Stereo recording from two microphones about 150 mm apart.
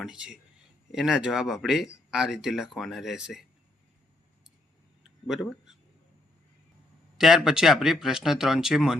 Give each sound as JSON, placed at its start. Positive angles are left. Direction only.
{"t": 0.0, "sound": "speech", "side_deg": -5}
{"t": 5.0, "sound": "a sound", "side_deg": -5}
{"t": 7.2, "sound": "speech", "side_deg": -5}